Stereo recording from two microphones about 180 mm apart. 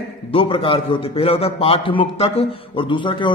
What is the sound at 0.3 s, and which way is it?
A man's voice, 30° left (ahead or behind).